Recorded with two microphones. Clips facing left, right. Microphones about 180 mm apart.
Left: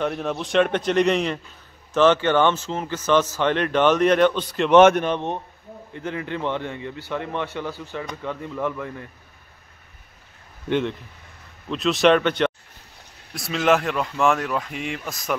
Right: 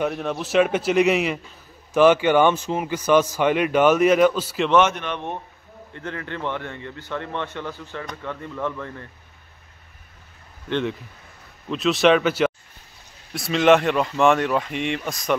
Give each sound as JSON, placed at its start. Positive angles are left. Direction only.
{"t": 0.0, "sound": "speech", "side_deg": 0}
{"t": 5.0, "sound": "a man's voice", "side_deg": 35}
{"t": 5.9, "sound": "a man's voice", "side_deg": 15}
{"t": 11.7, "sound": "speech", "side_deg": 0}